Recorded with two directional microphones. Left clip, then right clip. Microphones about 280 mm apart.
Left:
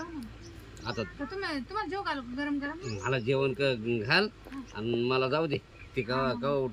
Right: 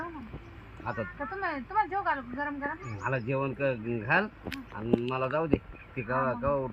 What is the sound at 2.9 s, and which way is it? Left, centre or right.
Speech, centre.